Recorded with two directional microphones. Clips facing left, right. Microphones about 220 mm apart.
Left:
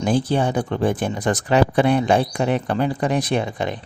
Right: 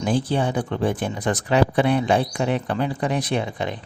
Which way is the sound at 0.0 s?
45° left (ahead or behind).